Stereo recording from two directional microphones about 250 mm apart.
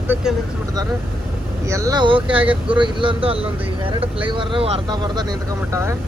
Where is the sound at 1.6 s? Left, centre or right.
Centre.